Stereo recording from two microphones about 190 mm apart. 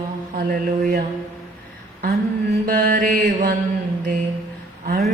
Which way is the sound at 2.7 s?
50° right (ahead or behind).